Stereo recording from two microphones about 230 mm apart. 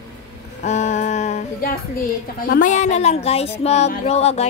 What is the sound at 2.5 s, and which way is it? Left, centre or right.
Music, left.